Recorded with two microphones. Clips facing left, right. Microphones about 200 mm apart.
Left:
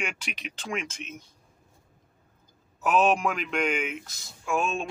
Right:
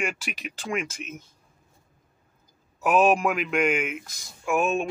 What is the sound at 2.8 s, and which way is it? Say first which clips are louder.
Speech: right 3 dB; 10° right (ahead or behind).